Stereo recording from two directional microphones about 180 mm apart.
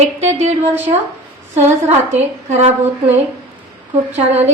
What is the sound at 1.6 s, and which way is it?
A woman's voice, 40° right (ahead or behind).